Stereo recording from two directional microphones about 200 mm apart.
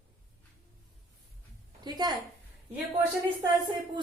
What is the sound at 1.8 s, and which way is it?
Speech, 20° right (ahead or behind).